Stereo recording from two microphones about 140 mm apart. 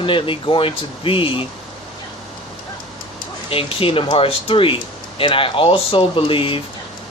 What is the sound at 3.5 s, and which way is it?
Speech, 40° left (ahead or behind).